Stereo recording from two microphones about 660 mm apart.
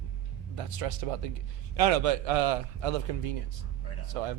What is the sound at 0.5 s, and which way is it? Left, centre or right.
A man's voice, right.